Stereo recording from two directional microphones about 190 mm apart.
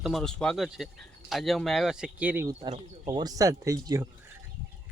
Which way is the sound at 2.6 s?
30° right (ahead or behind).